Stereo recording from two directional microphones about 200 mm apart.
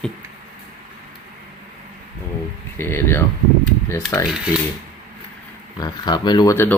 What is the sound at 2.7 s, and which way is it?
Speech, 10° left (ahead or behind).